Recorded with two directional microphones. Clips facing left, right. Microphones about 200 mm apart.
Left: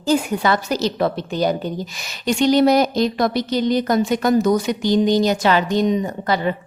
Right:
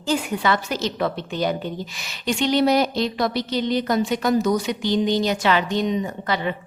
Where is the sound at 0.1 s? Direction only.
40° left (ahead or behind).